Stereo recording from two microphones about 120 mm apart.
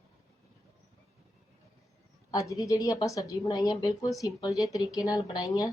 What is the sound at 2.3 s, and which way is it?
A woman's voice, 30° left (ahead or behind).